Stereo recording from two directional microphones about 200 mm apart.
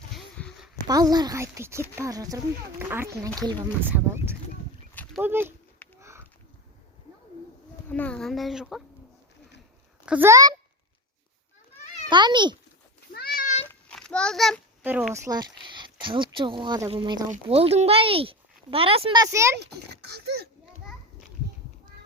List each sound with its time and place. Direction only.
0.1 s a sound: centre (ahead or behind)
0.9 s speech: 20° right (ahead or behind)
6.0 s a sound: 15° right (ahead or behind)
7.9 s speech: 10° left (ahead or behind)
10.1 s speech: 10° right (ahead or behind)
12.0 s speech: 20° right (ahead or behind)
13.1 s cat: 45° left (ahead or behind)
13.7 s a sound: 5° left (ahead or behind)
14.8 s speech: 10° right (ahead or behind)
19.5 s a child's voice: 55° right (ahead or behind)